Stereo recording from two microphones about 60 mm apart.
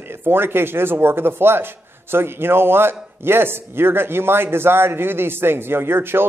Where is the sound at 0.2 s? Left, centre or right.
Right.